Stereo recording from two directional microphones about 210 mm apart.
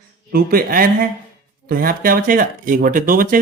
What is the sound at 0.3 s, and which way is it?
Speech, 45° right (ahead or behind).